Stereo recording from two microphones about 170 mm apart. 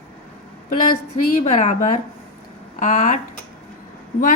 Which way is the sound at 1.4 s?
45° left (ahead or behind).